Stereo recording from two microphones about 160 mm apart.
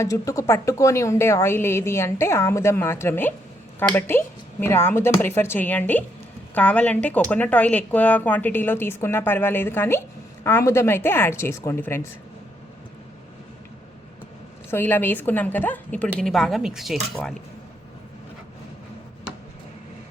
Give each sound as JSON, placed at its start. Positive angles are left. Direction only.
{"t": 0.0, "sound": "speech", "side_deg": 20}
{"t": 14.7, "sound": "speech", "side_deg": 15}